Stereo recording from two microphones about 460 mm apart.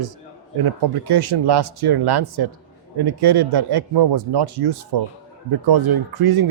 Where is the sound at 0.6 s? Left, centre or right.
Right.